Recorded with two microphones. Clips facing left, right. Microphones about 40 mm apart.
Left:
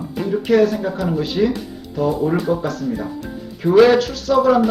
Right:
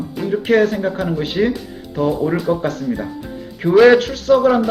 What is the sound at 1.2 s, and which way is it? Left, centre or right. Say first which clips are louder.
Speech: even; right.